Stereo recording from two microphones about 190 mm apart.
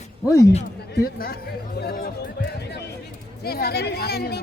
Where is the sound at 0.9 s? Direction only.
55° left (ahead or behind).